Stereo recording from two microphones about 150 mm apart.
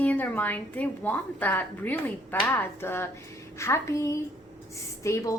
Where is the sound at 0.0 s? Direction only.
10° left (ahead or behind).